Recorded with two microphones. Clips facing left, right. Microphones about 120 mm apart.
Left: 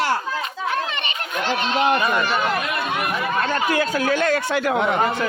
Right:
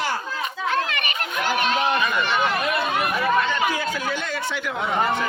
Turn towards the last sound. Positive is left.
turn(degrees=60)  # may be behind; listen again after turning